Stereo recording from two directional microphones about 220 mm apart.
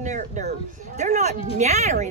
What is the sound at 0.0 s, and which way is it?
Speech, 35° right (ahead or behind).